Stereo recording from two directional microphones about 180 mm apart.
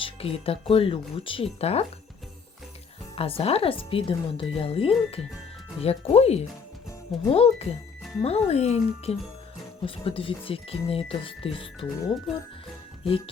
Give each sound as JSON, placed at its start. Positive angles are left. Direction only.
{"t": 0.0, "sound": "speech", "side_deg": 30}
{"t": 3.2, "sound": "speech", "side_deg": 30}
{"t": 13.1, "sound": "speech", "side_deg": 30}